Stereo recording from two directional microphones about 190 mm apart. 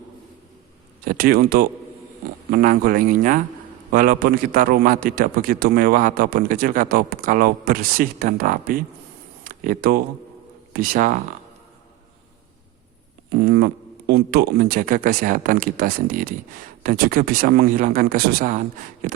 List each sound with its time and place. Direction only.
1.0 s a man's voice: 50° right (ahead or behind)
9.4 s a sound: 45° right (ahead or behind)
10.7 s a man's voice: 50° right (ahead or behind)
14.1 s a man's voice: 55° right (ahead or behind)